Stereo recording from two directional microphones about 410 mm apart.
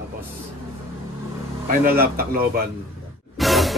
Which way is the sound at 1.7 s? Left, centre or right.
Right.